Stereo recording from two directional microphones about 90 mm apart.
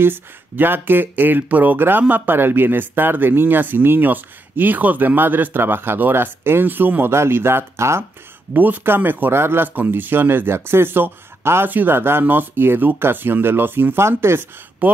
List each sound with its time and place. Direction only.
0.0 s speech: 25° right (ahead or behind)